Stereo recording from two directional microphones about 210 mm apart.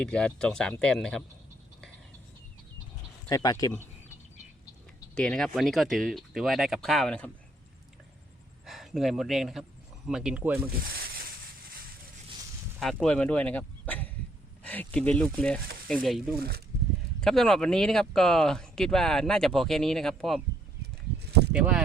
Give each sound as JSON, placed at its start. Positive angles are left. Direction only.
{"t": 0.0, "sound": "speech", "side_deg": 5}
{"t": 3.2, "sound": "speech", "side_deg": 20}
{"t": 8.6, "sound": "speech", "side_deg": 0}
{"t": 10.9, "sound": "a sound", "side_deg": -45}
{"t": 12.8, "sound": "speech", "side_deg": 5}
{"t": 21.2, "sound": "a sound", "side_deg": -50}
{"t": 21.5, "sound": "speech", "side_deg": -5}